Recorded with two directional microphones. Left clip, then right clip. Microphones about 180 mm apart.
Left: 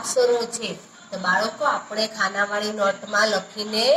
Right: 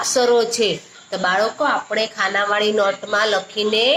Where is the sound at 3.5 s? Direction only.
10° right (ahead or behind).